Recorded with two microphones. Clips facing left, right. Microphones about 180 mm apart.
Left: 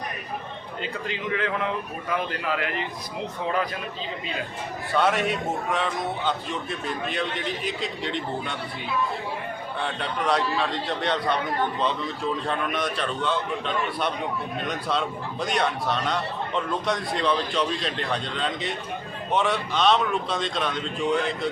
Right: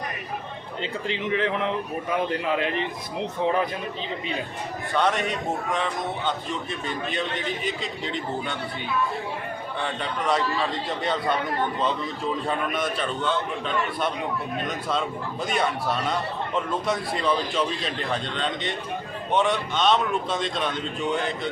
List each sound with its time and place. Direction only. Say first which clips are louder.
0.8 s speech: right 2 dB; 25° right (ahead or behind)
4.9 s a man's voice: left 1 dB; 5° left (ahead or behind)
9.8 s a man's voice: even; centre (ahead or behind)
12.5 s a man's voice: right 1 dB; 5° right (ahead or behind)
14.6 s a man's voice: left 1 dB; centre (ahead or behind)